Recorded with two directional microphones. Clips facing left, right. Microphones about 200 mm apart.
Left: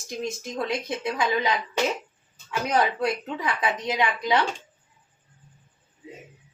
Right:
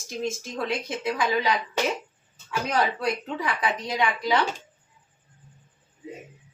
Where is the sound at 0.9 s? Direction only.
20° left (ahead or behind).